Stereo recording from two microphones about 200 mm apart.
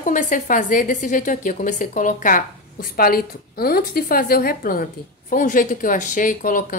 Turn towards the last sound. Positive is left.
turn(degrees=40)  # may be behind; listen again after turning